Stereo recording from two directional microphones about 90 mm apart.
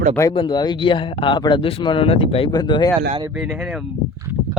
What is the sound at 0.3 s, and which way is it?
A man's voice, 60° left (ahead or behind).